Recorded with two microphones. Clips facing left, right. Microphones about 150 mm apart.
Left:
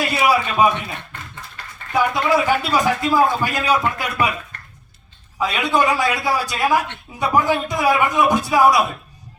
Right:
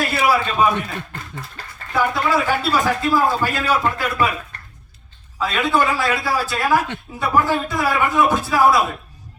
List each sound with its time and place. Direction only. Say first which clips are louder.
0.0 s a sound: even; 15° left (ahead or behind)
1.9 s a man's voice: left 1 dB; 15° left (ahead or behind)
5.4 s a man's voice: even; 15° left (ahead or behind)